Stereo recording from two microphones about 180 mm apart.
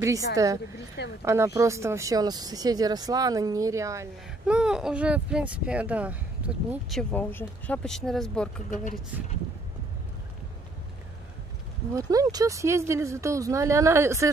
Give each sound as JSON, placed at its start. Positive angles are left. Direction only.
{"t": 0.0, "sound": "speech", "side_deg": -20}
{"t": 4.5, "sound": "speech", "side_deg": -5}
{"t": 7.0, "sound": "speech", "side_deg": 10}
{"t": 8.6, "sound": "speech", "side_deg": 45}
{"t": 11.9, "sound": "speech", "side_deg": -20}